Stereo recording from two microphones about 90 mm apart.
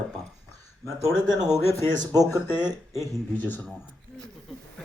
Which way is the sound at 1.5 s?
30° left (ahead or behind).